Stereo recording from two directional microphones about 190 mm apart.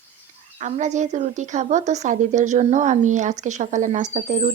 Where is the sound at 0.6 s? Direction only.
40° right (ahead or behind).